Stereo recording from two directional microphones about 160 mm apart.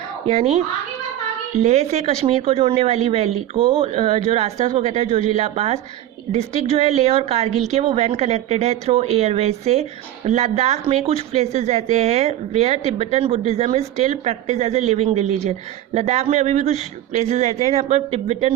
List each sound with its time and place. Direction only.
0.3 s a woman's voice: 40° right (ahead or behind)